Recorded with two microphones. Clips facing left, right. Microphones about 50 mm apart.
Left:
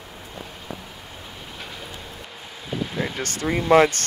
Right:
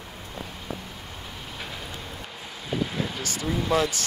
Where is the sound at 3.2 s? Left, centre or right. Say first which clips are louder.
Left 4 dB; left.